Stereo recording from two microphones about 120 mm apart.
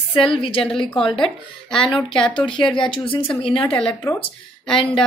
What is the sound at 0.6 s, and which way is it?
Speech, 5° left (ahead or behind).